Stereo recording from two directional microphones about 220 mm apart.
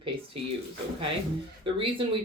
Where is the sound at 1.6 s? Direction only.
25° right (ahead or behind).